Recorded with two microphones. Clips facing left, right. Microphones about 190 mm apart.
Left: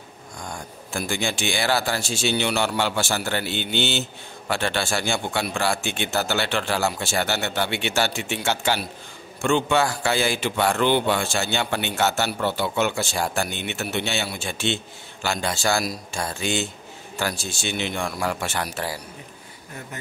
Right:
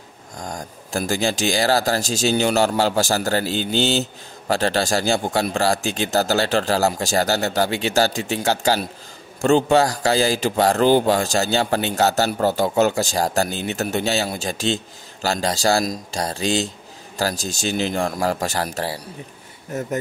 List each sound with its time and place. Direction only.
0.4 s speech: 40° right (ahead or behind)